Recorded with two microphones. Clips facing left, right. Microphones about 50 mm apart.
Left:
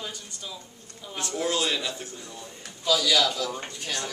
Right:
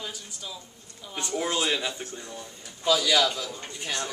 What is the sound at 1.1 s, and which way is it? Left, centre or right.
A man's voice, centre.